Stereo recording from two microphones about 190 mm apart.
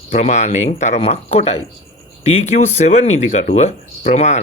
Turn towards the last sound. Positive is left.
turn(degrees=35)  # may be behind; listen again after turning